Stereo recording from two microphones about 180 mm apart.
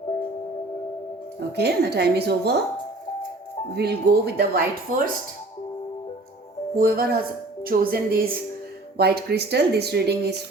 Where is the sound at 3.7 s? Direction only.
60° right (ahead or behind).